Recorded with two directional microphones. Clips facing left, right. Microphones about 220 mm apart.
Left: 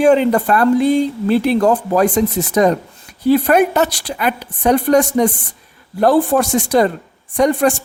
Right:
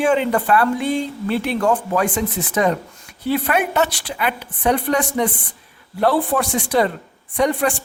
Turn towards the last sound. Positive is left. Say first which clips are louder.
# left 5 dB
turn(degrees=45)  # may be behind; listen again after turning